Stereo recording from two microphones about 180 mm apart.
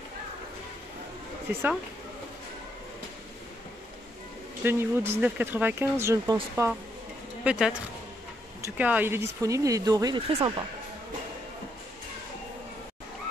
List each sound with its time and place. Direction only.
1.5 s speech: 10° right (ahead or behind)
4.6 s speech: 15° right (ahead or behind)
7.4 s speech: 5° right (ahead or behind); by 10.5 s 25° right (ahead or behind)